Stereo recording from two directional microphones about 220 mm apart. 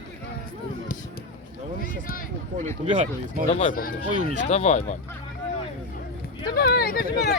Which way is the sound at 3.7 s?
40° left (ahead or behind).